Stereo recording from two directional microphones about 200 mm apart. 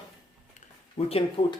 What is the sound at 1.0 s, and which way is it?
Speech, 30° left (ahead or behind).